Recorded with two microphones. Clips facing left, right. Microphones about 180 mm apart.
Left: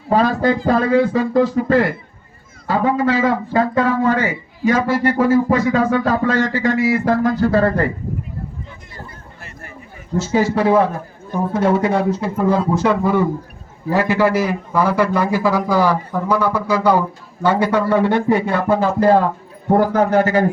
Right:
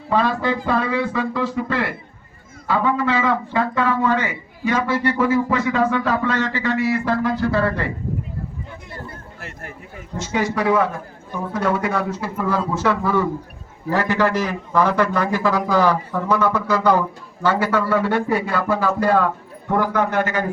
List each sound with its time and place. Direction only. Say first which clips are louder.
0.1 s speech: left 4 dB; 40° left (ahead or behind)
10.3 s a man's voice: left 4 dB; 30° left (ahead or behind); by 17.0 s centre (ahead or behind)
17.4 s a man's voice: left 3 dB; 15° left (ahead or behind); by 20.4 s 35° left (ahead or behind)